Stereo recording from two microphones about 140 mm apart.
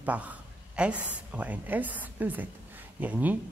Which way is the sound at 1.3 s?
10° right (ahead or behind).